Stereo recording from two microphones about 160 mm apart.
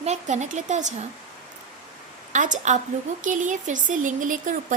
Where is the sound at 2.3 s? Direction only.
50° right (ahead or behind).